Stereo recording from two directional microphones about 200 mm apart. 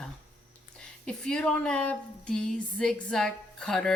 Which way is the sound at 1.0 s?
5° left (ahead or behind).